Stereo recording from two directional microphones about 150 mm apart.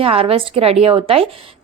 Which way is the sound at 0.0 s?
40° right (ahead or behind).